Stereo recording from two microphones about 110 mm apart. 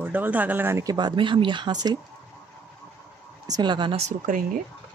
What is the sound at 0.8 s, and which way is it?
Speech, 40° right (ahead or behind).